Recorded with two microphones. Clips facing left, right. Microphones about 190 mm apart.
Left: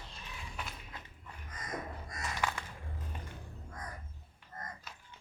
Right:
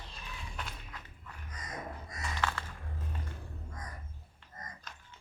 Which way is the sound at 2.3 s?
15° left (ahead or behind).